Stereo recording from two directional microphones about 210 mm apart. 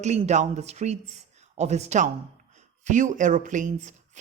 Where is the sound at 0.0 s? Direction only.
35° right (ahead or behind).